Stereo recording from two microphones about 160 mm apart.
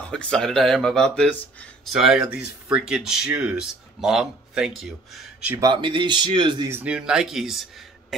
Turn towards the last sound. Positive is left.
turn(degrees=0)  # may be behind; listen again after turning